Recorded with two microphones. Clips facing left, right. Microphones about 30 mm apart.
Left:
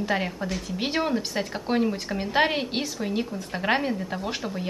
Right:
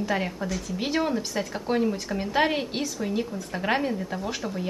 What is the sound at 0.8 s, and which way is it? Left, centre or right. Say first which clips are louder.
A woman's voice: even; left.